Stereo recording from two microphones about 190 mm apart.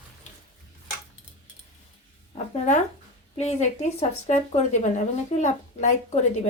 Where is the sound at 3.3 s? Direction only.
35° left (ahead or behind).